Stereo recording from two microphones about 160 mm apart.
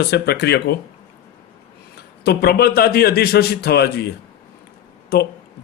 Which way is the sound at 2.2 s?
85° left.